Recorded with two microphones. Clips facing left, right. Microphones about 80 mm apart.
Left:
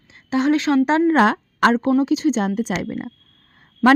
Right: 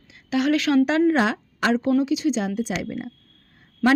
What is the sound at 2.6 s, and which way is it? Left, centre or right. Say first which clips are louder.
Speech: left 3 dB; left.